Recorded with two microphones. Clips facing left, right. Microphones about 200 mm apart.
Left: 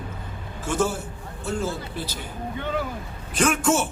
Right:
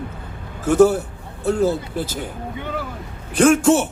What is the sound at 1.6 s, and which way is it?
Speech, 40° right (ahead or behind).